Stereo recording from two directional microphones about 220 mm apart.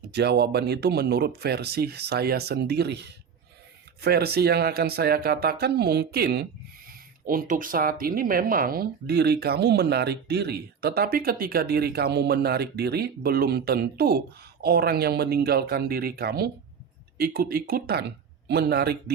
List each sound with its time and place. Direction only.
0.1 s speech: 50° right (ahead or behind)